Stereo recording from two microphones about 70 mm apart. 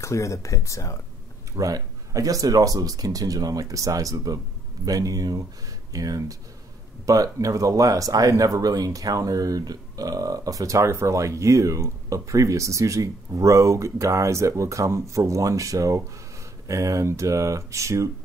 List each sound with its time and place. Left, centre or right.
0.0 s speech: left
1.6 s speech: right